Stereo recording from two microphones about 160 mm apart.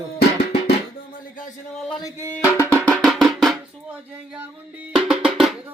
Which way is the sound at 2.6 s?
10° left (ahead or behind).